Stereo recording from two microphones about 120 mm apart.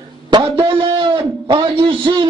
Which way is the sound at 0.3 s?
40° right (ahead or behind).